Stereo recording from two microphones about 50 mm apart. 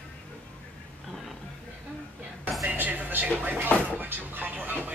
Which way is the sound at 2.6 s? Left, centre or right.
Right.